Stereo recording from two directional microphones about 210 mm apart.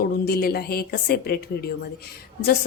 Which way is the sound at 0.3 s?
50° left (ahead or behind).